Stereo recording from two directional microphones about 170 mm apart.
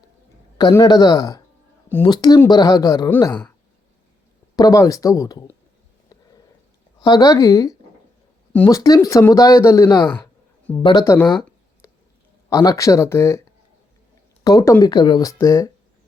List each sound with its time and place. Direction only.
0.6 s speech: 20° left (ahead or behind)
4.5 s speech: 20° left (ahead or behind)
7.0 s speech: 25° left (ahead or behind)
10.7 s speech: 10° left (ahead or behind)
12.5 s speech: 20° left (ahead or behind)
14.4 s speech: 20° left (ahead or behind)